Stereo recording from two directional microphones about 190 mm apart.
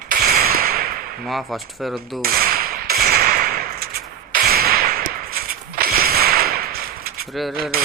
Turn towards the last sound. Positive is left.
turn(degrees=-50)  # may be behind; listen again after turning